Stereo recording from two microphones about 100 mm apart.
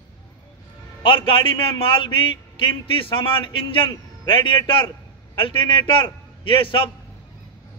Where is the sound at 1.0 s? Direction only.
60° left (ahead or behind).